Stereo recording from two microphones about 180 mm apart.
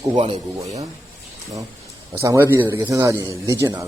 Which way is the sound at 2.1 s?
15° right (ahead or behind).